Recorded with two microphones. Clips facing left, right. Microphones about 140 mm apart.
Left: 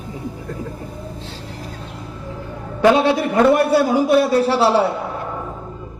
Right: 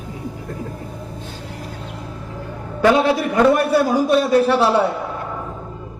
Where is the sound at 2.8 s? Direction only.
30° left (ahead or behind).